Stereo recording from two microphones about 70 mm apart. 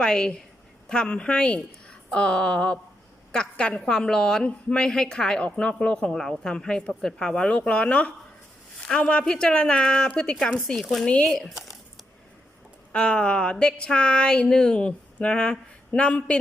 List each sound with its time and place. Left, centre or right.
0.0 s a woman's voice: centre
12.9 s a woman's voice: centre